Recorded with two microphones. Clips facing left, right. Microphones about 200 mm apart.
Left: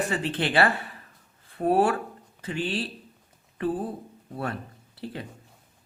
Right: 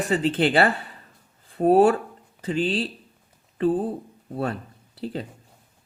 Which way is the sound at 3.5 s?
25° right (ahead or behind).